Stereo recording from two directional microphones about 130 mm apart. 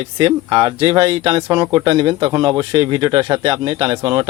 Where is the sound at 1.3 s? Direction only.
30° right (ahead or behind).